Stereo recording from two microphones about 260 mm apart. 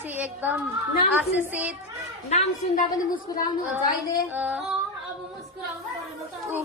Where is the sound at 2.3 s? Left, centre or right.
Left.